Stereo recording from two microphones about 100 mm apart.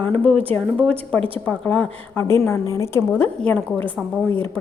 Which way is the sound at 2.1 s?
25° left (ahead or behind).